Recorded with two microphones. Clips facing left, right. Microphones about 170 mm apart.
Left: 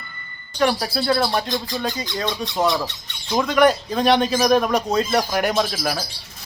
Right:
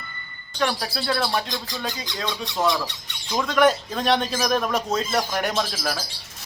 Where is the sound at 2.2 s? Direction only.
20° left (ahead or behind).